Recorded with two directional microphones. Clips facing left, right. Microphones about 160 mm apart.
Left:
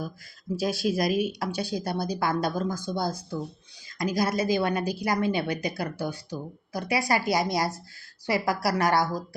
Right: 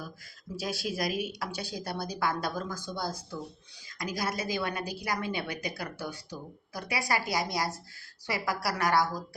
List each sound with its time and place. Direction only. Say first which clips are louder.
0.6 s a woman's voice: left 7 dB; 25° left (ahead or behind)